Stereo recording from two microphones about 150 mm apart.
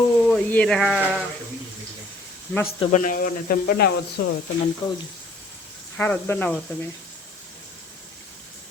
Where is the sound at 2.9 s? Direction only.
65° left (ahead or behind); by 4.2 s 90° left.